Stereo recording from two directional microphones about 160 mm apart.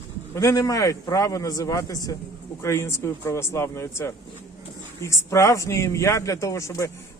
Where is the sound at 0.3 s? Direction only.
20° left (ahead or behind).